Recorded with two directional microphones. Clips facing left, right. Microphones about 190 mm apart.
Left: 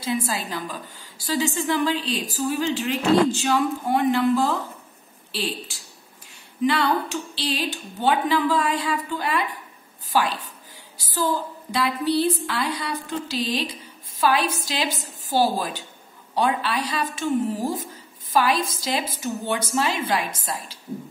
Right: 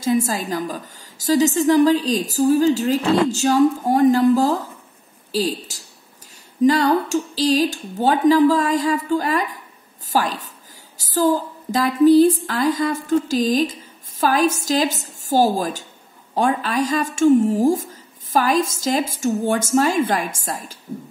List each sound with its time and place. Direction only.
0.0 s a woman's voice: 45° right (ahead or behind)
5.3 s a sound: 40° right (ahead or behind)
6.6 s a woman's voice: 40° right (ahead or behind)